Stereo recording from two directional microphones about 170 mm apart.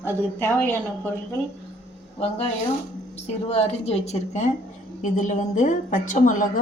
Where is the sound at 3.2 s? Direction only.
35° left (ahead or behind).